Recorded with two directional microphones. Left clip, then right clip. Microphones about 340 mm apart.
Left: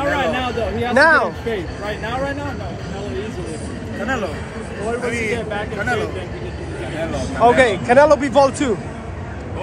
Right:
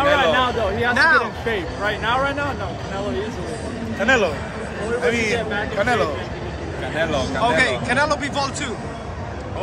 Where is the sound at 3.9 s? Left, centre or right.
Right.